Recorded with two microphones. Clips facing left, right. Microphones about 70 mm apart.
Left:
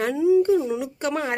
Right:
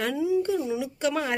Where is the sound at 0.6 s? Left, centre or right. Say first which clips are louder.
Left 1 dB; left.